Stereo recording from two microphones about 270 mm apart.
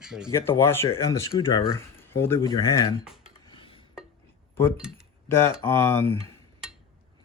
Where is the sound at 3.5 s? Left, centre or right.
Centre.